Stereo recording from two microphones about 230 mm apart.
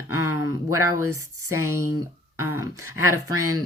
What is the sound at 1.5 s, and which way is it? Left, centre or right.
Speech, centre.